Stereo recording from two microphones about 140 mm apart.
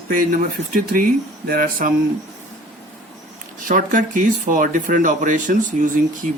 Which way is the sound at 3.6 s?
70° right (ahead or behind).